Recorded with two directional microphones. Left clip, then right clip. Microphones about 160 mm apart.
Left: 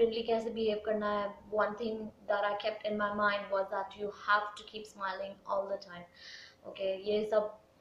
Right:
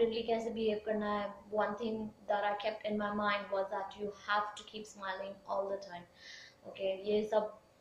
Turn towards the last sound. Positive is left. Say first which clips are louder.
# left 2 dB
turn(degrees=5)  # may be behind; listen again after turning